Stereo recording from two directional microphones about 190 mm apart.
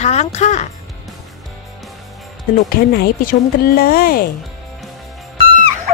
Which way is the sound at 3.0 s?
50° left (ahead or behind).